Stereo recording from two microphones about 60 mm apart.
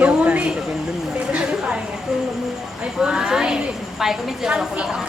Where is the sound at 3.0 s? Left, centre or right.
Centre.